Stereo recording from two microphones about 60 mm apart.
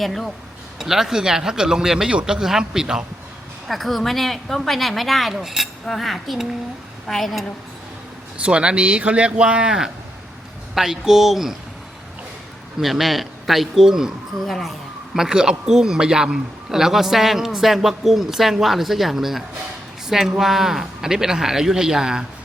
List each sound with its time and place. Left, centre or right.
0.0 s a man's voice: centre
3.7 s a man's voice: centre
8.4 s a man's voice: centre
12.8 s a man's voice: centre
14.4 s a man's voice: centre
15.1 s a man's voice: centre